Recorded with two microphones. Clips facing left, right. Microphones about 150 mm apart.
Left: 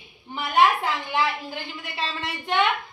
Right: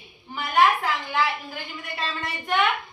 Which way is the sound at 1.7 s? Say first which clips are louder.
Right 2 dB; 20° left (ahead or behind).